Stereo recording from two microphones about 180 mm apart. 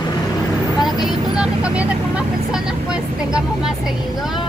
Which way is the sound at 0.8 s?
5° right (ahead or behind).